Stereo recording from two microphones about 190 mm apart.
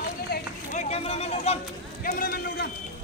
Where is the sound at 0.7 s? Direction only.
35° left (ahead or behind).